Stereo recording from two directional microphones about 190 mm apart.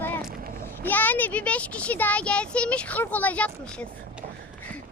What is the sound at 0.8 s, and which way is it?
Speech, 10° left (ahead or behind).